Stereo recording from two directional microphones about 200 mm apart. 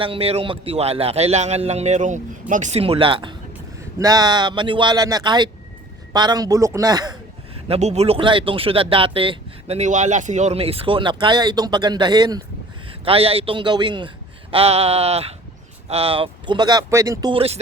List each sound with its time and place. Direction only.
0.0 s a man's voice: 30° right (ahead or behind)
7.7 s a man's voice: 35° right (ahead or behind)